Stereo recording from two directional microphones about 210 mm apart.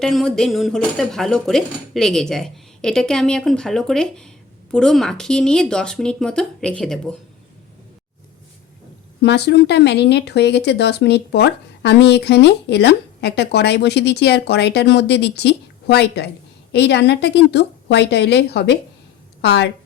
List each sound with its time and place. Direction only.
0.0 s speech: centre (ahead or behind)
9.2 s a woman's voice: 55° left (ahead or behind)